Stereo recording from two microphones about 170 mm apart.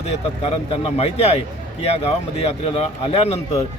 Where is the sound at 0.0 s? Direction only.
35° left (ahead or behind).